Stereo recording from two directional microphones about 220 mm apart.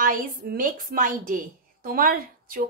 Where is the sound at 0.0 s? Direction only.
40° right (ahead or behind).